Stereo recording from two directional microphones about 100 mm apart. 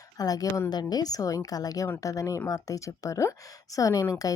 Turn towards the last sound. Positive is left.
turn(degrees=35)  # may be behind; listen again after turning